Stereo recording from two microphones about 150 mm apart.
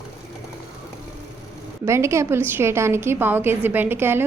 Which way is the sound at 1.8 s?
20° right (ahead or behind).